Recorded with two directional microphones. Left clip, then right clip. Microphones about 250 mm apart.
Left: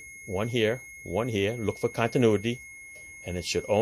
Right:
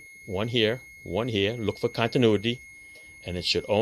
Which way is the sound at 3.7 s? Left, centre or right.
Centre.